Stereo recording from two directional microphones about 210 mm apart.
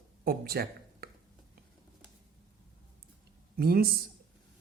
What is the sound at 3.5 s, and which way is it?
Speech, 45° right (ahead or behind).